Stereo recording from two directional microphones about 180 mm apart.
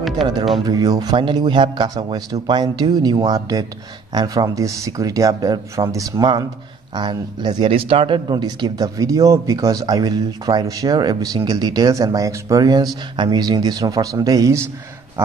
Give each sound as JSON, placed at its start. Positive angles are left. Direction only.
{"t": 0.7, "sound": "speech", "side_deg": -20}